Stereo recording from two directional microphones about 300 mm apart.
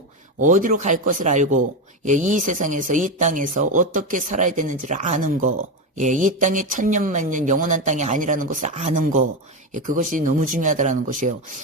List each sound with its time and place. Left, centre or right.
0.4 s speech: right